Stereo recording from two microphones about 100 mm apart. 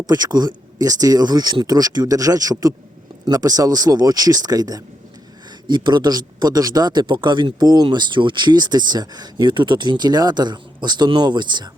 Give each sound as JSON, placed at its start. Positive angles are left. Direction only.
{"t": 0.0, "sound": "speech", "side_deg": -45}